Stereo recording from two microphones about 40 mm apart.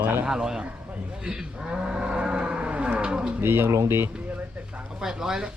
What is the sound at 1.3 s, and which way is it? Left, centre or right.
Cattle, centre.